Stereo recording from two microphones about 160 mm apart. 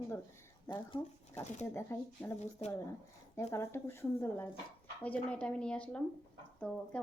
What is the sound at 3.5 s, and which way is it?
A woman's voice, 15° left (ahead or behind).